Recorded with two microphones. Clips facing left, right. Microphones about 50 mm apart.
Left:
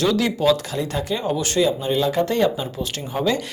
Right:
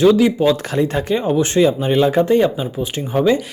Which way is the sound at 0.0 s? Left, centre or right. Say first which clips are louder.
Right 6 dB; centre.